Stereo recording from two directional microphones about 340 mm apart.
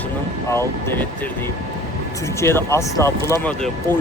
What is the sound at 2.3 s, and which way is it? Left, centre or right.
Speech, centre.